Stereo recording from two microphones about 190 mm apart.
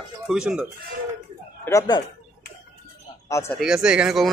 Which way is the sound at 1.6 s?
20° left (ahead or behind).